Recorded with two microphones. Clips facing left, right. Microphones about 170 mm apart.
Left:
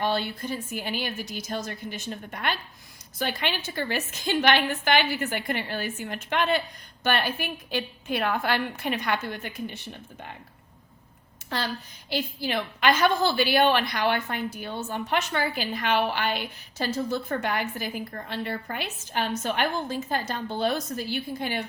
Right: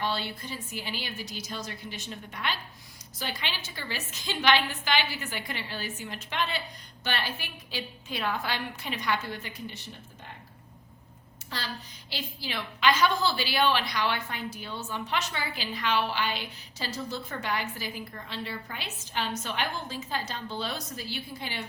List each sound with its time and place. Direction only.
0.0 s a woman's voice: 50° left (ahead or behind)
11.4 s a woman's voice: 55° left (ahead or behind)